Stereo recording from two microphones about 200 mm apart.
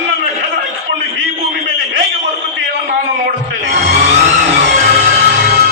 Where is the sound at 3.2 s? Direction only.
45° right (ahead or behind).